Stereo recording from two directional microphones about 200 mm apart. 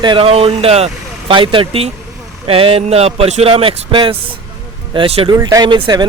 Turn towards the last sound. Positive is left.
turn(degrees=-20)  # may be behind; listen again after turning